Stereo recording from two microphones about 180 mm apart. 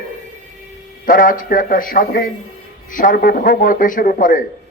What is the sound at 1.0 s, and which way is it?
A man's voice, 50° left (ahead or behind).